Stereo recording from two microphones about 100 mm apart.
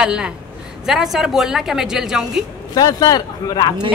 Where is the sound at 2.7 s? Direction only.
40° left (ahead or behind).